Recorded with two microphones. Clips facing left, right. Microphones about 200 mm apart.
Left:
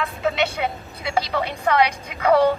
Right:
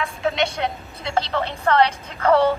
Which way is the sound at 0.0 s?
Centre (ahead or behind).